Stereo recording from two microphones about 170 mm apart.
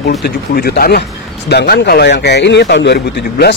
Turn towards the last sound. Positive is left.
turn(degrees=80)